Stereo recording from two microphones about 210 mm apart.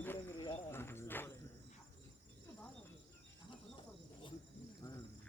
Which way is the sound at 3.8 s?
25° left (ahead or behind).